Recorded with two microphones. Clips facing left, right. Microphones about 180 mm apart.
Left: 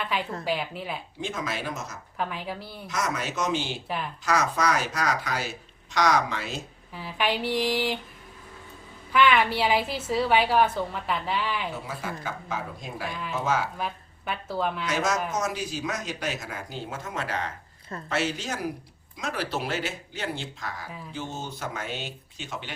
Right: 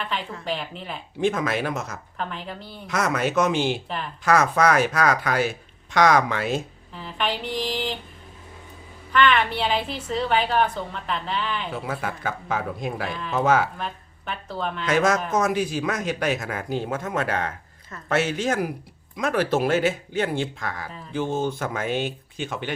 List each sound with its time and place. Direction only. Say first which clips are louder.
0.4 s a woman's voice: left 1 dB; 5° left (ahead or behind)
1.2 s speech: right 10 dB; 55° right (ahead or behind)
2.1 s a woman's voice: left 1 dB; 5° left (ahead or behind)
2.8 s speech: right 6 dB; 60° right (ahead or behind)
6.9 s a woman's voice: even; 10° left (ahead or behind)
9.1 s a woman's voice: right 1 dB; 5° left (ahead or behind)
11.7 s speech: right 5 dB; 60° right (ahead or behind)
13.7 s speech: even; 5° left (ahead or behind)
14.8 s speech: right 6 dB; 55° right (ahead or behind)